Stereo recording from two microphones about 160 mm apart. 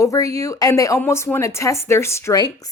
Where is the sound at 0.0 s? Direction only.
20° left (ahead or behind).